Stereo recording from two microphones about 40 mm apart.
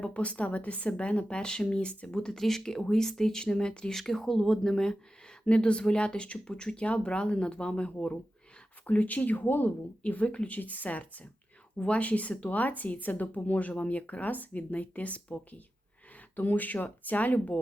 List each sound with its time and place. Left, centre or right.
0.0 s speech: left
3.9 s speech: centre
5.5 s speech: left
8.9 s speech: left
10.2 s speech: left
10.5 s speech: left
11.8 s speech: left
16.3 s speech: left